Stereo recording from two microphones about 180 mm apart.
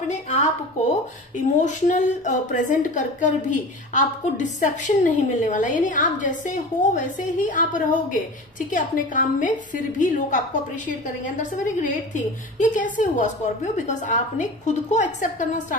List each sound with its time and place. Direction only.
0.1 s a woman's voice: 40° left (ahead or behind)
1.6 s a woman's voice: 40° left (ahead or behind)